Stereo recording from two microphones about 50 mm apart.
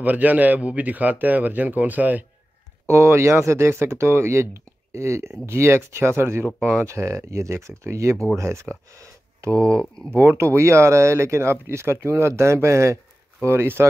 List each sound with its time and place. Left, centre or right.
0.0 s speech: right
2.9 s speech: right
8.9 s speech: right
10.1 s speech: right